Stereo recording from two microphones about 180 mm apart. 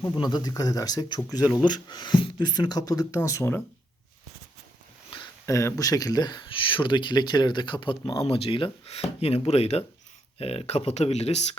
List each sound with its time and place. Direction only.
0.0 s speech: 20° left (ahead or behind)
5.1 s speech: 15° left (ahead or behind); by 11.4 s 35° left (ahead or behind)